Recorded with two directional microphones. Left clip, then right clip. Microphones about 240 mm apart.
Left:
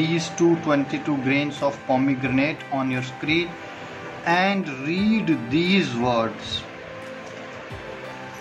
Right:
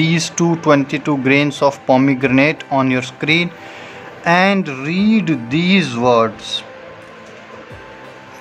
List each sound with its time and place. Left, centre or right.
0.0 s speech: right